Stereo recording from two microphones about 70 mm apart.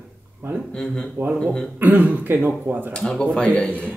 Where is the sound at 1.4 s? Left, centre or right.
Centre.